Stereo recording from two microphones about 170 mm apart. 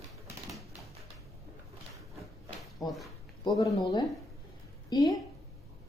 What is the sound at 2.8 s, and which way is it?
A woman's voice, 20° left (ahead or behind).